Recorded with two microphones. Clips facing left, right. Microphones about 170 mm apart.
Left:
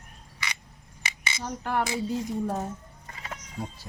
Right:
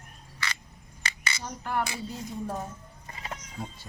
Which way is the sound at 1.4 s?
60° left (ahead or behind).